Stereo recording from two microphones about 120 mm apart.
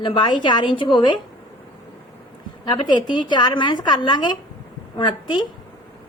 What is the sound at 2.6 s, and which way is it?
A woman's voice, 40° left (ahead or behind).